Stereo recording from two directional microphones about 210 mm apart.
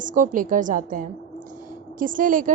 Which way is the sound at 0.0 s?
40° right (ahead or behind).